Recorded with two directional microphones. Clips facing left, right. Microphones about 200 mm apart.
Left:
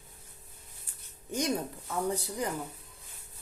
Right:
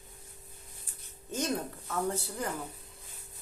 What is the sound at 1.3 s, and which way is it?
Speech, 15° left (ahead or behind).